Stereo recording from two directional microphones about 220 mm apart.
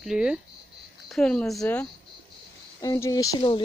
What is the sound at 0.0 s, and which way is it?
Speech, 5° right (ahead or behind).